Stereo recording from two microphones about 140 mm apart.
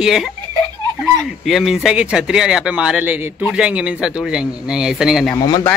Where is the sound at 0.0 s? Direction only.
5° right (ahead or behind).